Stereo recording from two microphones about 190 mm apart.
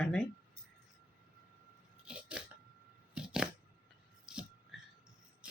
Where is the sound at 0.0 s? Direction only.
5° left (ahead or behind).